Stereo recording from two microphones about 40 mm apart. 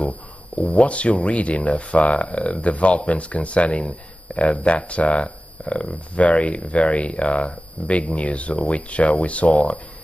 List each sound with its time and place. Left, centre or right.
0.6 s speech: left